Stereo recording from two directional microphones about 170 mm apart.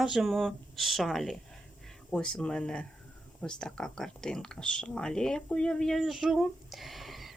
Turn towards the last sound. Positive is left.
turn(degrees=0)  # may be behind; listen again after turning